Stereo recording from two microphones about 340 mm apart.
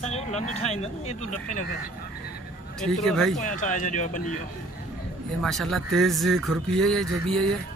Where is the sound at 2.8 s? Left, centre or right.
Centre.